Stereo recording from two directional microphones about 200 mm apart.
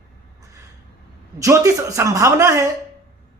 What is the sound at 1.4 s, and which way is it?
Speech, 15° right (ahead or behind).